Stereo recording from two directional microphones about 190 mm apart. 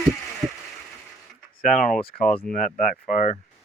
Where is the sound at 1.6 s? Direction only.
40° left (ahead or behind).